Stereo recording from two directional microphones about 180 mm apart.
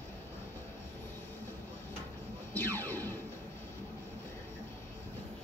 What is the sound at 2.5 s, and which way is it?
Music, 10° left (ahead or behind).